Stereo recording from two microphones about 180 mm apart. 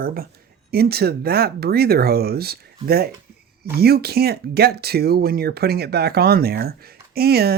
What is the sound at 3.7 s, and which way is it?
Speech, 60° right (ahead or behind).